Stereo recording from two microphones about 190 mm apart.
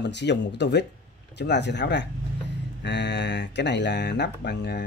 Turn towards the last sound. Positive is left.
turn(degrees=65)  # may be behind; listen again after turning